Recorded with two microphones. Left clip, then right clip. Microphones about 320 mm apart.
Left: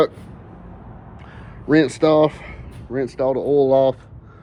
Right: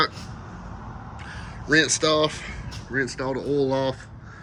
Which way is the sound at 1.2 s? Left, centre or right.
Centre.